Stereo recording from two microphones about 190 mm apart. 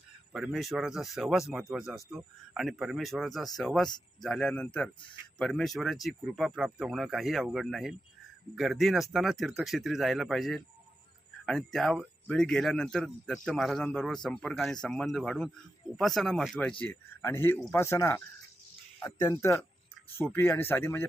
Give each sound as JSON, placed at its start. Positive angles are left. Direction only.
{"t": 0.3, "sound": "speech", "side_deg": 0}